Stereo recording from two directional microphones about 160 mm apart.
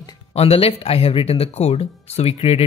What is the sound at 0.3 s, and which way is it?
Speech, 40° left (ahead or behind).